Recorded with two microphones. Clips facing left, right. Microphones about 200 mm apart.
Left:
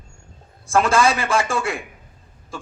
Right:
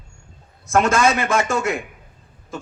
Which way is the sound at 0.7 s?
30° left (ahead or behind).